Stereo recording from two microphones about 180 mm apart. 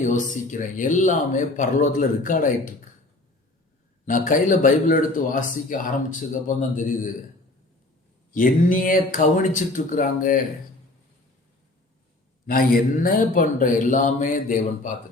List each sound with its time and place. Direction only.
0.0 s speech: 45° left (ahead or behind)
4.0 s speech: 45° left (ahead or behind)
8.3 s speech: 50° left (ahead or behind)
12.5 s speech: 55° left (ahead or behind)